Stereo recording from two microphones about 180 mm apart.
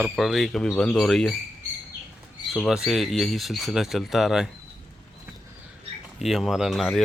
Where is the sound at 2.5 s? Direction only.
Centre (ahead or behind).